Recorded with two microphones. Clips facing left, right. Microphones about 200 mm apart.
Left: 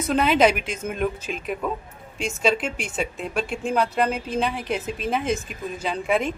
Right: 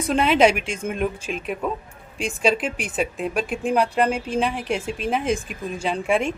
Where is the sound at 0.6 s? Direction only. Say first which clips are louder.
Right 1 dB; 30° right (ahead or behind).